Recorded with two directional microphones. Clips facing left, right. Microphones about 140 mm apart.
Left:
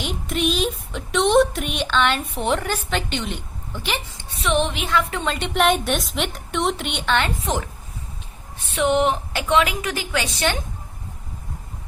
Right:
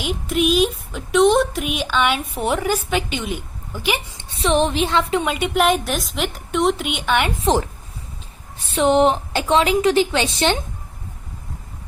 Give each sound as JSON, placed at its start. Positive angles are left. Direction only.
{"t": 0.0, "sound": "speech", "side_deg": -5}
{"t": 4.2, "sound": "speech", "side_deg": -30}
{"t": 5.1, "sound": "speech", "side_deg": -10}
{"t": 8.7, "sound": "a woman's voice", "side_deg": -35}